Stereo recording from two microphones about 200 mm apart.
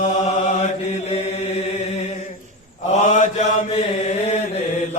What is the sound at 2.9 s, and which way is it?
Mantra, 35° left (ahead or behind).